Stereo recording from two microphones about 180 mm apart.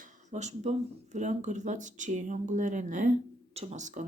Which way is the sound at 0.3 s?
40° right (ahead or behind).